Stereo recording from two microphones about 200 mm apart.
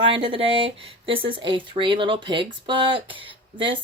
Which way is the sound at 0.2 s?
25° right (ahead or behind).